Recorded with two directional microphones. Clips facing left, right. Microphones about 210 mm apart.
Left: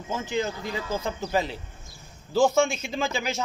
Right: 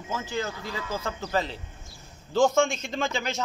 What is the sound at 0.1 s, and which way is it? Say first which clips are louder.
A man's voice: left 3 dB; 20° left (ahead or behind).